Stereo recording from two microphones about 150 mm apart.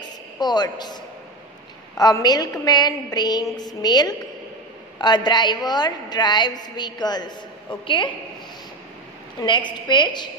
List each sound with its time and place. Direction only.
0.4 s a woman's voice: 30° left (ahead or behind)
2.0 s a woman's voice: 25° left (ahead or behind)
9.4 s a woman's voice: 30° left (ahead or behind)